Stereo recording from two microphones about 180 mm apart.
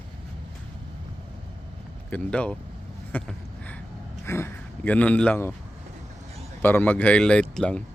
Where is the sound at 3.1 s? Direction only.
10° left (ahead or behind).